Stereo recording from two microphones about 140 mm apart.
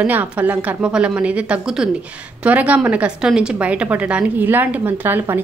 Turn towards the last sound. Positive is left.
turn(degrees=-15)  # may be behind; listen again after turning